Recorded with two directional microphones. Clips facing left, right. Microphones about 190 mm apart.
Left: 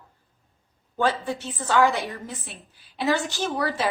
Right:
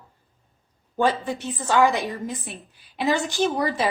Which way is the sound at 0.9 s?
15° right (ahead or behind).